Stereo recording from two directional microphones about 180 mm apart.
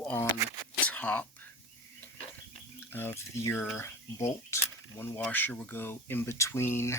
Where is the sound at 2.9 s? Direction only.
10° left (ahead or behind).